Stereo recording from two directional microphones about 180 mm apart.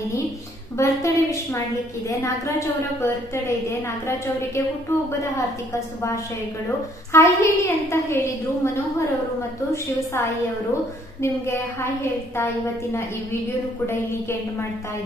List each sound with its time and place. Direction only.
0.7 s a woman's voice: 15° left (ahead or behind)
7.1 s a woman's voice: 15° left (ahead or behind)
11.4 s a woman's voice: 15° left (ahead or behind)